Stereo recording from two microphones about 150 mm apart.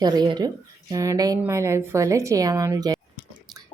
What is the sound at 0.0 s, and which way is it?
Speech, 25° right (ahead or behind).